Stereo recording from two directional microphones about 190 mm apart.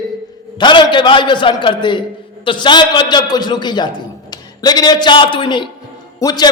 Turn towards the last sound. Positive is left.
turn(degrees=20)  # may be behind; listen again after turning